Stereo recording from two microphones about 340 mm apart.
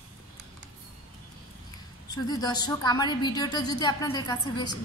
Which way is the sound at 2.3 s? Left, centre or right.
Centre.